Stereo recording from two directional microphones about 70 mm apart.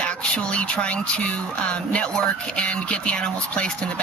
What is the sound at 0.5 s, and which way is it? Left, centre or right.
Speech, centre.